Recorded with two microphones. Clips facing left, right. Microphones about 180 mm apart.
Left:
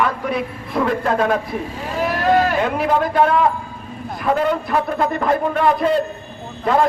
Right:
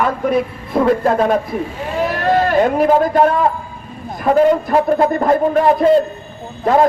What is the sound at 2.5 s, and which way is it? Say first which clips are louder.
A man's voice: right 6 dB; 45° right (ahead or behind).